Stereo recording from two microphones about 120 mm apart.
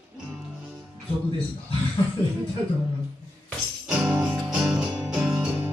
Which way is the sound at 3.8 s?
10° right (ahead or behind).